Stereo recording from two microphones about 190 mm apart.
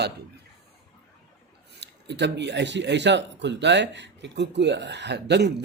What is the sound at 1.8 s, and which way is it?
A man's voice, 65° right (ahead or behind).